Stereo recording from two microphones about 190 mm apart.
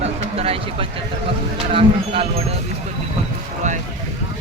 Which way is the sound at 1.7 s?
30° right (ahead or behind).